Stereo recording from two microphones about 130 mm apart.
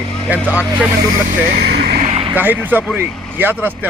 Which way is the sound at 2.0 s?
60° right (ahead or behind).